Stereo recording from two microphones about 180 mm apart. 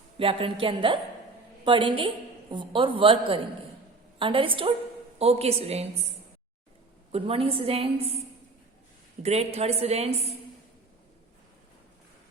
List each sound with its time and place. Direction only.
0.2 s a woman's voice: 30° right (ahead or behind)
7.1 s a woman's voice: 30° right (ahead or behind)
9.2 s a woman's voice: 35° right (ahead or behind)